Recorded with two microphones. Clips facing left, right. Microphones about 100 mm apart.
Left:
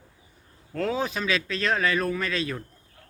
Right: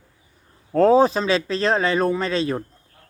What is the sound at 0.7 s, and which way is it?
Speech, 35° right (ahead or behind).